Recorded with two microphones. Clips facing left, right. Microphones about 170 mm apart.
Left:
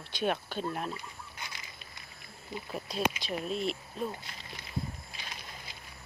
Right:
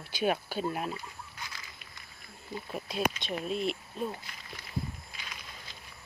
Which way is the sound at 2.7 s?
Centre (ahead or behind).